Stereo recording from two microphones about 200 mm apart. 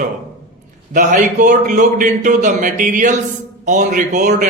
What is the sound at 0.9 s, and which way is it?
A man's voice, 40° right (ahead or behind).